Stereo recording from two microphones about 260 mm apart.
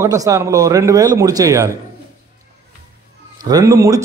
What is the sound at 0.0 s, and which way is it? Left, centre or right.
A man's voice, centre.